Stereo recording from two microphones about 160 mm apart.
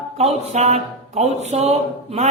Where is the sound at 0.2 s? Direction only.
45° right (ahead or behind).